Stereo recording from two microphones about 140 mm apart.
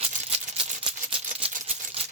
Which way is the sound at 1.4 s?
45° right (ahead or behind).